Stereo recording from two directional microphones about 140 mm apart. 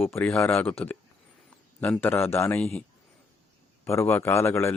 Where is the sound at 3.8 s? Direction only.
20° left (ahead or behind).